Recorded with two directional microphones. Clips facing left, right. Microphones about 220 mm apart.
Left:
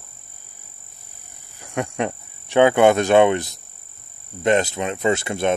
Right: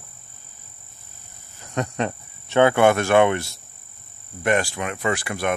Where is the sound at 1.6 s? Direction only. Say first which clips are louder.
Left 1 dB; 10° left (ahead or behind).